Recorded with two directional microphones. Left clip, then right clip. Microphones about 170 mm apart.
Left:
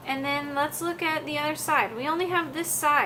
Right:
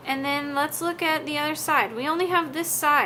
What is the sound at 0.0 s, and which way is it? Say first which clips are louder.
A woman's voice: right 2 dB; 25° right (ahead or behind).